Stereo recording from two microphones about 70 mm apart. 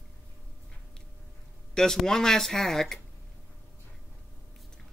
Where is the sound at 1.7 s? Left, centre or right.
Centre.